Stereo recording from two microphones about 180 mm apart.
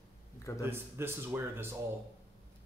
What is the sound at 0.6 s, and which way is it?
Speech, 15° right (ahead or behind).